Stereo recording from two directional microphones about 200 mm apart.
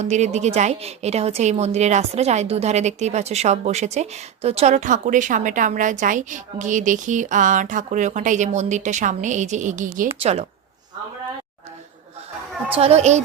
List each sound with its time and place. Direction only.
0.0 s a woman's voice: 35° right (ahead or behind)
12.7 s a woman's voice: 30° right (ahead or behind)